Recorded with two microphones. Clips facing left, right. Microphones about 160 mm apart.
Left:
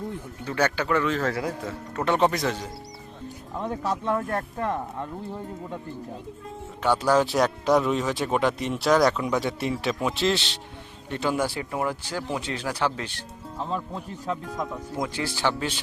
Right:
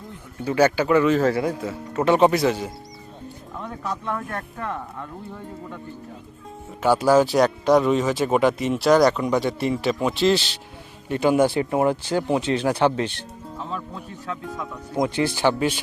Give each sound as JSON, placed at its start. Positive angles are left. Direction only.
{"t": 0.4, "sound": "a man's voice", "side_deg": -10}
{"t": 3.6, "sound": "speech", "side_deg": 30}
{"t": 6.8, "sound": "speech", "side_deg": -5}
{"t": 11.1, "sound": "speech", "side_deg": -15}
{"t": 13.7, "sound": "speech", "side_deg": 30}
{"t": 15.0, "sound": "a man's voice", "side_deg": -20}